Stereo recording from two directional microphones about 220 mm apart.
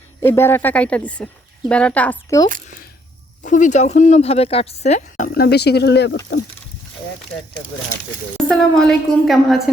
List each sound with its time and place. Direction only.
0.2 s speech: 10° left (ahead or behind)
3.4 s speech: 35° left (ahead or behind); by 6.4 s 55° left (ahead or behind)
8.4 s a woman's voice: 5° left (ahead or behind)